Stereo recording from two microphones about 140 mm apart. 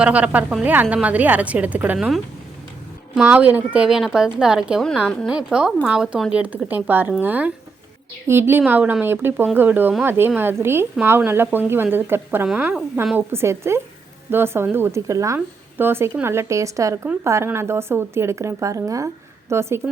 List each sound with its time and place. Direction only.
0.0 s a woman's voice: 10° right (ahead or behind)
5.0 s a woman's voice: 5° left (ahead or behind)
5.3 s a woman's voice: 5° right (ahead or behind)